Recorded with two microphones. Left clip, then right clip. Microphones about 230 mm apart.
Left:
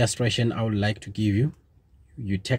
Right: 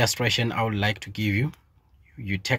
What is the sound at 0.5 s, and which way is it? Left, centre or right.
Speech, right.